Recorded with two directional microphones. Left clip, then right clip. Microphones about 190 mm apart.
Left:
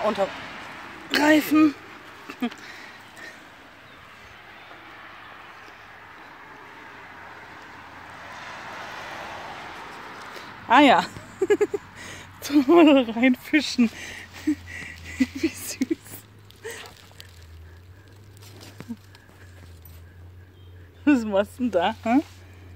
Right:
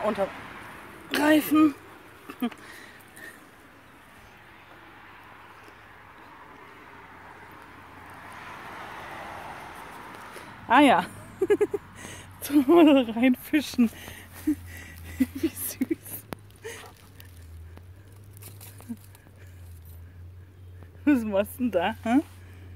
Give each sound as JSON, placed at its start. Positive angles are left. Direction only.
{"t": 0.0, "sound": "speech", "side_deg": 5}
{"t": 8.3, "sound": "vehicle", "side_deg": 35}
{"t": 10.7, "sound": "speech", "side_deg": 0}
{"t": 21.0, "sound": "speech", "side_deg": 5}